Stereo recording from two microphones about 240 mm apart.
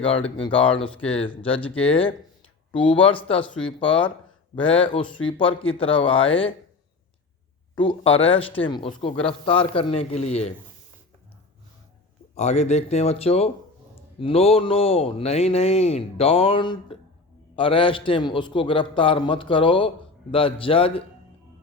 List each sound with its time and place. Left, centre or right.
0.4 s speech: left
7.8 s speech: left
12.3 s speech: left